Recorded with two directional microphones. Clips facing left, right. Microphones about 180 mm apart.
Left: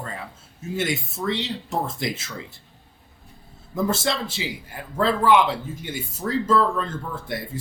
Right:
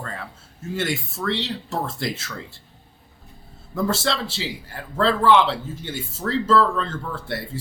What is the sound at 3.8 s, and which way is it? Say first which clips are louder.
A man's voice: even; 20° left (ahead or behind).